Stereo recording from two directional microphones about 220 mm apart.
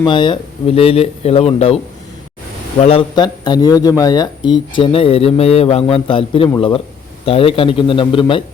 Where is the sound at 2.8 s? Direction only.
25° left (ahead or behind).